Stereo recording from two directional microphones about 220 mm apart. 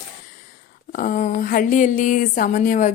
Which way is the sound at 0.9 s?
40° left (ahead or behind).